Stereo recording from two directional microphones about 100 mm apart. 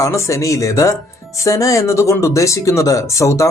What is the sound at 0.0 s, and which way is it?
Speech, 30° left (ahead or behind).